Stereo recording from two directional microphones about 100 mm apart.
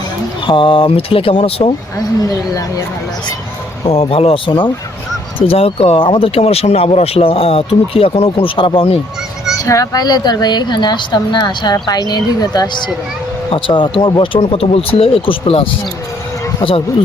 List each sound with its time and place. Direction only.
0.4 s speech: 55° left (ahead or behind); by 1.7 s 80° left
3.8 s speech: 70° left (ahead or behind)
5.4 s speech: 80° left
9.6 s a woman's voice: 35° left (ahead or behind)
13.5 s speech: 60° left (ahead or behind)